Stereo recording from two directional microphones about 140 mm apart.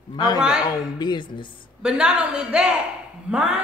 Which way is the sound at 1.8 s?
5° right (ahead or behind).